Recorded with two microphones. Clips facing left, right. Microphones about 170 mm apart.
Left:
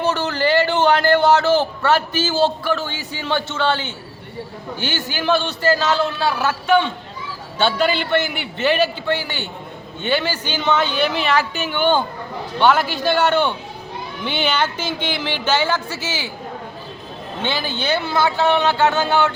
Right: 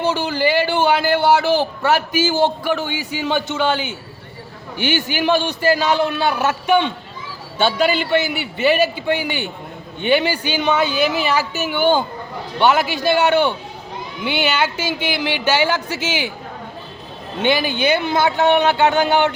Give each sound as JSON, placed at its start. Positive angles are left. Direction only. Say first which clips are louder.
{"t": 0.0, "sound": "a man's voice", "louder": "right 1 dB", "side_deg": -10}
{"t": 17.4, "sound": "a man's voice", "louder": "right 6 dB", "side_deg": -15}